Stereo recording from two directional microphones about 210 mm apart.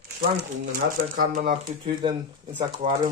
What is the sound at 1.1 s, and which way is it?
Speech, 40° right (ahead or behind).